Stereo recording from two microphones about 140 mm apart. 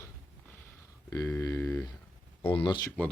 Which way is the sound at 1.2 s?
15° left (ahead or behind).